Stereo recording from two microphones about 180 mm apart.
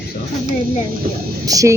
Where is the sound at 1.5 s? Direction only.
20° right (ahead or behind).